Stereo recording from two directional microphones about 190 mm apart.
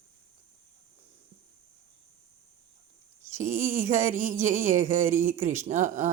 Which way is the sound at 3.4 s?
40° right (ahead or behind).